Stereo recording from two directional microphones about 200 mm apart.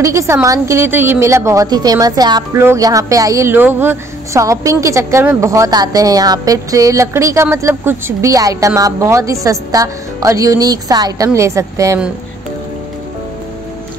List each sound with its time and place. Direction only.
0.0 s a woman's voice: 15° right (ahead or behind)